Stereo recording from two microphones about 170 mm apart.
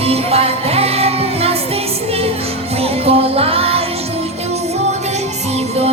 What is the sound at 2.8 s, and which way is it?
Music, 35° right (ahead or behind).